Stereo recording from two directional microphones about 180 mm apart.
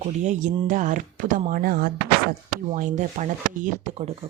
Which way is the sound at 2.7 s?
40° right (ahead or behind).